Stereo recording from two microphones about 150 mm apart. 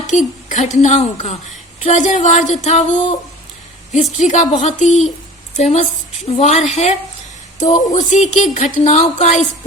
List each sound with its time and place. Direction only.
0.1 s speech: 50° left (ahead or behind)
4.2 s speech: 55° left (ahead or behind)